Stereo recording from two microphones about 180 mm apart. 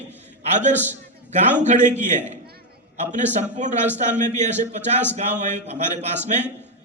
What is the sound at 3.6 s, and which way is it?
A man's voice, 40° right (ahead or behind).